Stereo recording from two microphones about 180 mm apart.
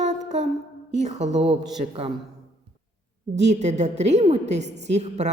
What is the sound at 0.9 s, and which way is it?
Speech, 40° right (ahead or behind).